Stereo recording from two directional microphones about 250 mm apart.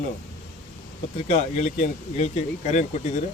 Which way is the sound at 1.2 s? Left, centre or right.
Left.